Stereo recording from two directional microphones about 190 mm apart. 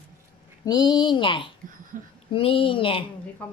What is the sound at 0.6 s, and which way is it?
Speech, 20° left (ahead or behind).